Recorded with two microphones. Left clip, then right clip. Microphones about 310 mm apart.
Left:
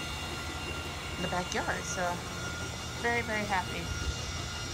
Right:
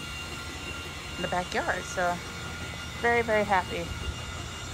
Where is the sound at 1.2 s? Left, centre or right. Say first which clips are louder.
Right 4 dB; centre.